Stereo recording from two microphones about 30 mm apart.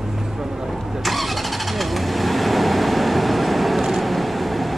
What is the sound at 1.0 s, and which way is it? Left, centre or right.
Vehicle, centre.